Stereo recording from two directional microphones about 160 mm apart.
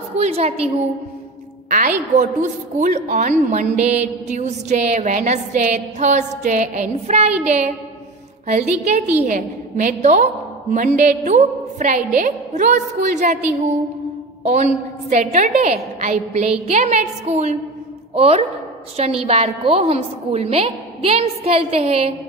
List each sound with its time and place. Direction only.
0.2 s a woman's voice: 40° right (ahead or behind)
1.7 s a woman's voice: 55° right (ahead or behind)
14.4 s a woman's voice: 45° right (ahead or behind)